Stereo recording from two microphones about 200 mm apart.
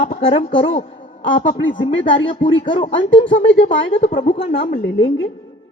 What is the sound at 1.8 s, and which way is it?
Speech, 25° left (ahead or behind).